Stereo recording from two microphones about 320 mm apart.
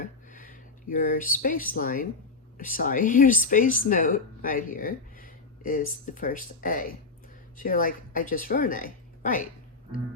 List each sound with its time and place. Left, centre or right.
0.0 s speech: left